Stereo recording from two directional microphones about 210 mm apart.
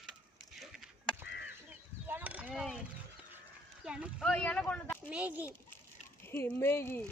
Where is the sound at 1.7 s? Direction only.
10° right (ahead or behind).